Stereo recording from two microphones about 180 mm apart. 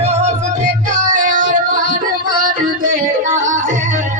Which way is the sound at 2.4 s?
50° right (ahead or behind).